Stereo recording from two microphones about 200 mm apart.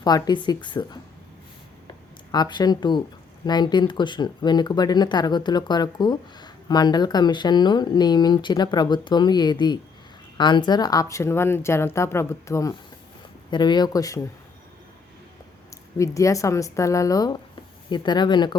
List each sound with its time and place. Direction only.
0.0 s speech: 20° left (ahead or behind)
1.9 s a sound: 20° left (ahead or behind)
3.4 s speech: 20° left (ahead or behind)
16.0 s speech: 15° left (ahead or behind)